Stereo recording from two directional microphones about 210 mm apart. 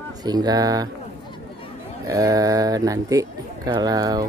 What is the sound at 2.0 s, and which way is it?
Speech, 15° right (ahead or behind).